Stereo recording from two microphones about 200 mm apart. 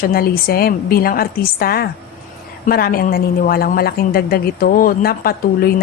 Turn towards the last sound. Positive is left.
turn(degrees=50)  # may be behind; listen again after turning